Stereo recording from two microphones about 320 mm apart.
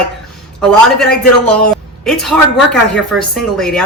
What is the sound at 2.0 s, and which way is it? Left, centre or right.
Speech, centre.